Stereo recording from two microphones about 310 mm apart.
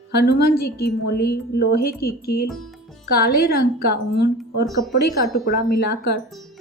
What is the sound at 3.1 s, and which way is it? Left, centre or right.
Speech, left.